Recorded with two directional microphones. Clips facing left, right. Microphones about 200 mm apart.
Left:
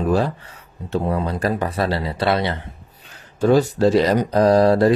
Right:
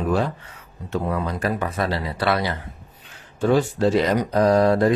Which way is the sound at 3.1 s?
40° left (ahead or behind).